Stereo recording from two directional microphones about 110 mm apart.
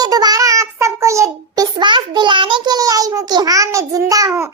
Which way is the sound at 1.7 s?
45° right (ahead or behind).